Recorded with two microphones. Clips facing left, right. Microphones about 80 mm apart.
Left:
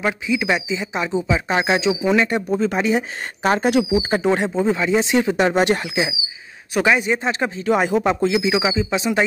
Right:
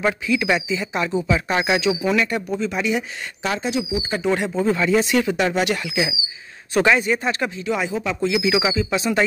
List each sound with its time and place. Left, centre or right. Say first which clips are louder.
0.0 s speech: even; centre
2.6 s speech: left 3 dB; left
3.6 s speech: left 6 dB; left
4.6 s speech: even; centre
6.7 s speech: even; centre; by 7.6 s left
7.6 s speech: left 8 dB; left
8.4 s speech: left 1 dB; left